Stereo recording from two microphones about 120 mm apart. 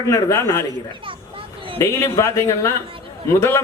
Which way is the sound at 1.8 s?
25° left (ahead or behind).